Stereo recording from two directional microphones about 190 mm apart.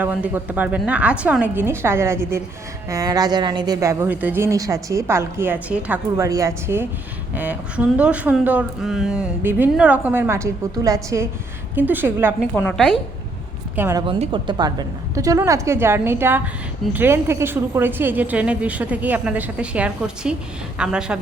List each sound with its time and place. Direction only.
0.0 s a woman's voice: 10° right (ahead or behind)
12.5 s a woman's voice: 5° left (ahead or behind)
13.7 s a woman's voice: 10° right (ahead or behind)
14.1 s a woman's voice: 25° right (ahead or behind); by 21.2 s 5° right (ahead or behind)